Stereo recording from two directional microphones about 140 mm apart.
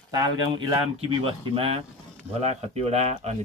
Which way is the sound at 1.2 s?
40° right (ahead or behind).